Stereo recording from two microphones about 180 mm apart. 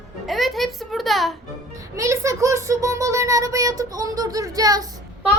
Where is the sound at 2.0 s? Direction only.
15° right (ahead or behind).